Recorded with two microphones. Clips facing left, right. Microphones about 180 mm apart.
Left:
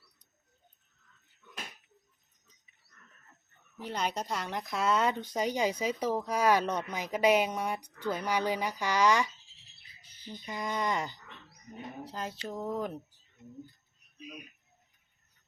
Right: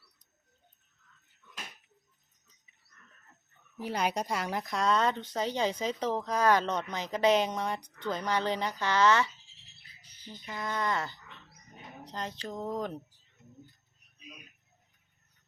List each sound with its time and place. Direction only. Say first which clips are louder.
3.8 s speech: right 3 dB; 10° right (ahead or behind); by 9.3 s 15° left (ahead or behind)
10.4 s speech: even; 15° left (ahead or behind)